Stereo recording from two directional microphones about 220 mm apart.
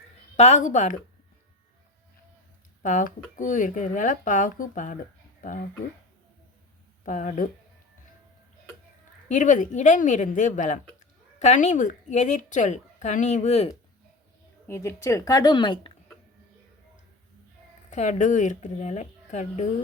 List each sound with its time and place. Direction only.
0.3 s a woman's voice: 30° left (ahead or behind)
2.8 s a woman's voice: 35° left (ahead or behind)
7.0 s a woman's voice: 35° left (ahead or behind)
9.3 s a woman's voice: 35° left (ahead or behind)
14.7 s speech: 15° left (ahead or behind)
17.9 s a woman's voice: 30° left (ahead or behind)